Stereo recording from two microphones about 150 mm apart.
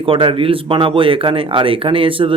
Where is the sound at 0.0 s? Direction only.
35° right (ahead or behind).